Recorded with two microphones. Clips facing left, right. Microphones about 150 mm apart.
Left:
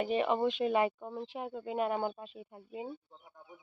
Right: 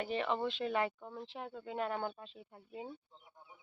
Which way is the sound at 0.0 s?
15° left (ahead or behind).